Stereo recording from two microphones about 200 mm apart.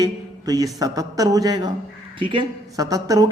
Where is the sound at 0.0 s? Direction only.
20° right (ahead or behind).